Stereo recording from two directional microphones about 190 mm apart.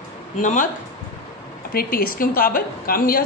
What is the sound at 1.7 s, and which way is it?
A woman's voice, 50° left (ahead or behind).